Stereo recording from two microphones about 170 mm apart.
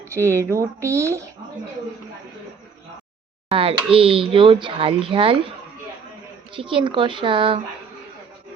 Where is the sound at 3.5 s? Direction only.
30° right (ahead or behind).